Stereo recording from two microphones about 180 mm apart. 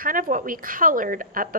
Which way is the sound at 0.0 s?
50° right (ahead or behind).